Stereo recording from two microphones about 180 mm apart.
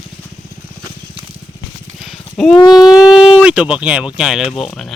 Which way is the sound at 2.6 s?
20° left (ahead or behind).